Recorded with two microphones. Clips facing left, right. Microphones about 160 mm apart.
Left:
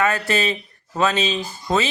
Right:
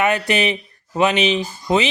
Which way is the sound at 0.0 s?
20° right (ahead or behind).